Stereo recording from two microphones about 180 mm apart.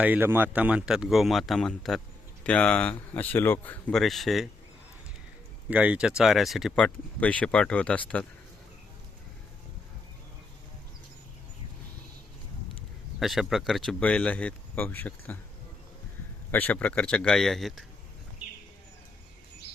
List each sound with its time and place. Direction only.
0.0 s speech: 10° right (ahead or behind)
5.6 s speech: 5° right (ahead or behind)
13.1 s speech: centre (ahead or behind)
16.5 s speech: 10° left (ahead or behind)